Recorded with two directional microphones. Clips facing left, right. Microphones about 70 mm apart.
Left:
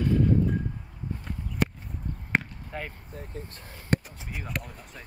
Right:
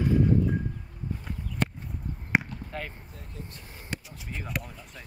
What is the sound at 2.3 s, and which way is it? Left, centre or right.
Basketball bounce, centre.